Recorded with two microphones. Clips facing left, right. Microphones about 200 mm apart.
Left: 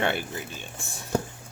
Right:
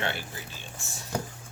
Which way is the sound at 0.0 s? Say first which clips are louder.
Left 6 dB; 55° left (ahead or behind).